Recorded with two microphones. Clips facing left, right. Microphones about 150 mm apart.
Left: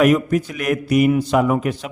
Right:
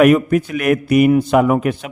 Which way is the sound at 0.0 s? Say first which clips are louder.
Right 4 dB; 60° right (ahead or behind).